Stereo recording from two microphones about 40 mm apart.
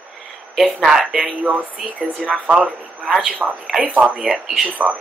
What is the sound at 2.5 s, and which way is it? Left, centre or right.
A man's voice, right.